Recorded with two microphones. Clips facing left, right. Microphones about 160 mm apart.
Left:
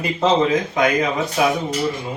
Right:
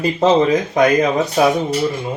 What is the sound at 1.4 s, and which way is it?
Speech, 35° right (ahead or behind).